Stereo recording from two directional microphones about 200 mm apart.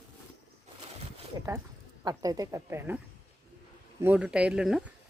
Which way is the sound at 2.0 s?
20° right (ahead or behind).